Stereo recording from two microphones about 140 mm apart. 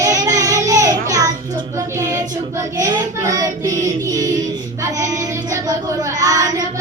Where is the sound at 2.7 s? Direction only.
25° right (ahead or behind).